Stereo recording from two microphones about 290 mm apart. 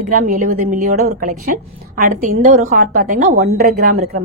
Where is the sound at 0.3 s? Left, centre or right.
Right.